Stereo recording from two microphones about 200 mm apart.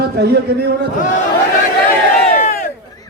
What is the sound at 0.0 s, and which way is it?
Speech, 55° right (ahead or behind).